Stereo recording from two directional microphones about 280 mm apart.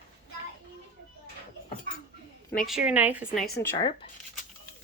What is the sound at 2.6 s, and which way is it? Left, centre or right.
Speech, centre.